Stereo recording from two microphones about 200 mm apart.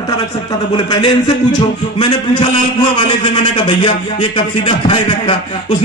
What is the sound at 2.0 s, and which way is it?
Speech, 25° left (ahead or behind).